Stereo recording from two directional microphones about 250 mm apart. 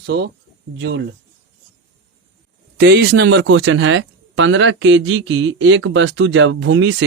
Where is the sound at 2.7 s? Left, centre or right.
Right.